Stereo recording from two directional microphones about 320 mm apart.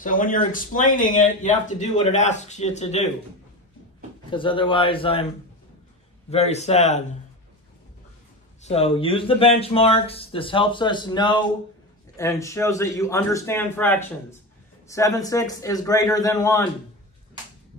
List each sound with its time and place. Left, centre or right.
0.0 s speech: left
4.3 s speech: centre
6.3 s speech: centre
8.6 s speech: centre